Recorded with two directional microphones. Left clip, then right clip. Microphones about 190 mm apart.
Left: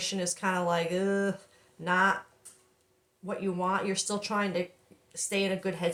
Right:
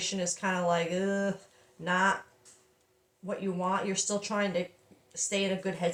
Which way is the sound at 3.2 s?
20° left (ahead or behind).